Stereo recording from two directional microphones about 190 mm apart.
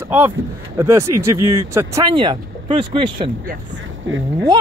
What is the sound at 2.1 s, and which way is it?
Speech, 25° right (ahead or behind).